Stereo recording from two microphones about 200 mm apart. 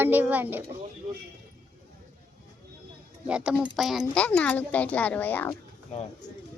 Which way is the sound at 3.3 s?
5° right (ahead or behind).